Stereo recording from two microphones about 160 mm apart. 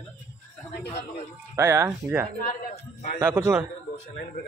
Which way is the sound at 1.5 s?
15° right (ahead or behind).